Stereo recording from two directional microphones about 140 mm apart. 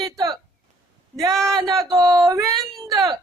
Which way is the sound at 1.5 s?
25° right (ahead or behind).